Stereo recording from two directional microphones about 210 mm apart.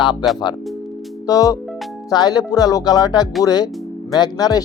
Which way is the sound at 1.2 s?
15° left (ahead or behind).